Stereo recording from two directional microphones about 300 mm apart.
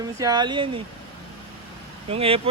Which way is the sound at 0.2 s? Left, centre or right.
Centre.